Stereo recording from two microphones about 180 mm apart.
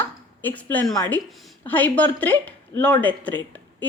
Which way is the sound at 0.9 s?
20° left (ahead or behind).